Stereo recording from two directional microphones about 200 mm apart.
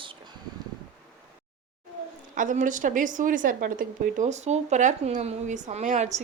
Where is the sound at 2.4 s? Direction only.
40° right (ahead or behind).